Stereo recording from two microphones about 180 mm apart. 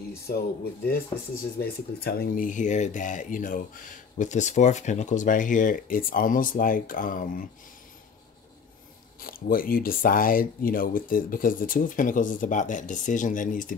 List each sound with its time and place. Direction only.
0.3 s speech: 55° left (ahead or behind)
1.6 s speech: 55° left (ahead or behind)
9.2 s speech: 55° left (ahead or behind)